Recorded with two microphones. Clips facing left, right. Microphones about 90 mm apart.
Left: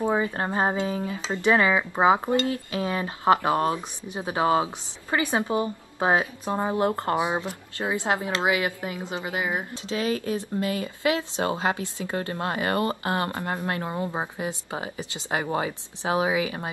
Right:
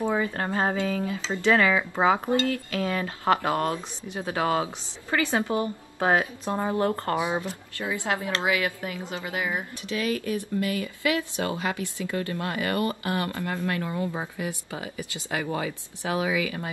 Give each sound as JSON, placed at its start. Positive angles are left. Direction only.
{"t": 0.0, "sound": "speech", "side_deg": 20}